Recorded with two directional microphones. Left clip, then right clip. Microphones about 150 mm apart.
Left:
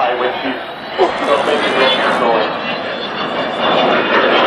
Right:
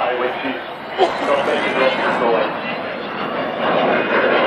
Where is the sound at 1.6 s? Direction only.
15° right (ahead or behind).